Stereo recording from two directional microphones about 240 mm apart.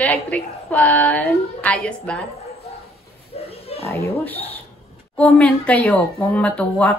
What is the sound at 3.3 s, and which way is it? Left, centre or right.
Oink, left.